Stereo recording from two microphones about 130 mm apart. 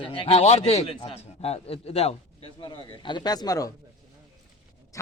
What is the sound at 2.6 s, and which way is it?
Speech, 35° left (ahead or behind).